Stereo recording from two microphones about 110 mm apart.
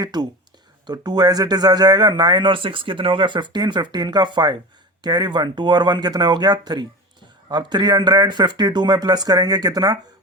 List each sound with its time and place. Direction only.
0.0 s speech: 40° right (ahead or behind)